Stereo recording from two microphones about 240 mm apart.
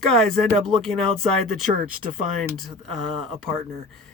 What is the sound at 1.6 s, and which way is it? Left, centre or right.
Speech, right.